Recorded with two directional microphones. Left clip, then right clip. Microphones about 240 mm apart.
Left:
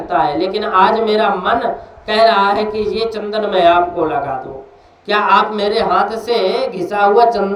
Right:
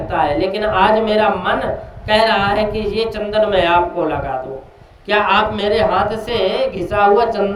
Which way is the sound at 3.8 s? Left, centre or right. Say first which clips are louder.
Left 2 dB; right.